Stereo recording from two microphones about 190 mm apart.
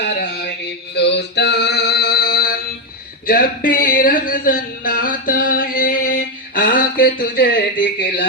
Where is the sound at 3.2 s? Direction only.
50° left (ahead or behind).